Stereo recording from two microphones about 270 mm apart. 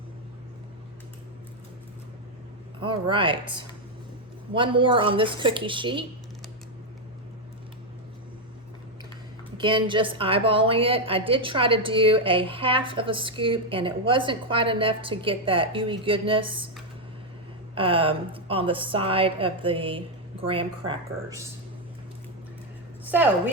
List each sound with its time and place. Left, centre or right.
2.8 s speech: centre
9.6 s a woman's voice: centre
17.7 s a woman's voice: centre
23.0 s a woman's voice: centre